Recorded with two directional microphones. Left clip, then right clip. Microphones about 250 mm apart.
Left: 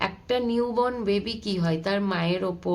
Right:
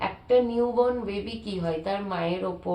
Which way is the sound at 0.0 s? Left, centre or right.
Left.